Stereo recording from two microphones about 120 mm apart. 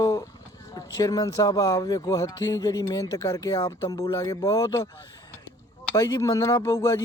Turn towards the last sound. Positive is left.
turn(degrees=25)  # may be behind; listen again after turning